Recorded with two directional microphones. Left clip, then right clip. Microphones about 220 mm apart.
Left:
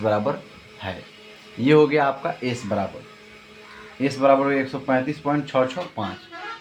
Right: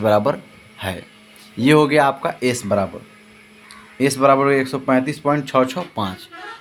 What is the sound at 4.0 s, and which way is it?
Speech, 60° right (ahead or behind).